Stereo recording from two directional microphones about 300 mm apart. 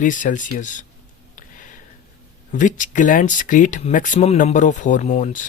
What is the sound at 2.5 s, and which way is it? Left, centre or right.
Speech, left.